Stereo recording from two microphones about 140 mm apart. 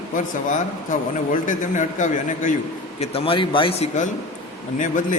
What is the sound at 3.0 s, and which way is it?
Speech, 45° left (ahead or behind).